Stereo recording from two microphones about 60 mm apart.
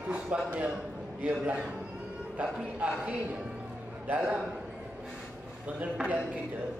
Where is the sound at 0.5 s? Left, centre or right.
Right.